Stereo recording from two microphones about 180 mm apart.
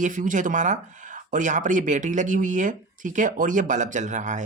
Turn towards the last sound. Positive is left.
turn(degrees=-40)  # may be behind; listen again after turning